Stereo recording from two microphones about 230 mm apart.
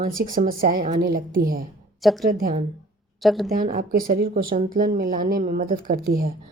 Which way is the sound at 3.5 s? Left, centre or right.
Right.